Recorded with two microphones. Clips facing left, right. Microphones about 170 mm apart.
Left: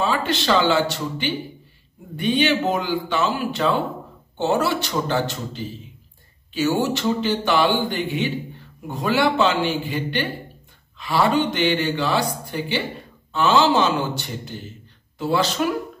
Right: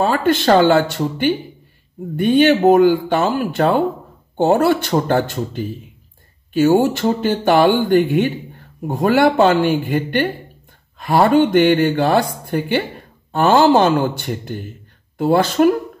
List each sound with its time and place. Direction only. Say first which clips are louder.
0.0 s speech: right 7 dB; 50° right (ahead or behind)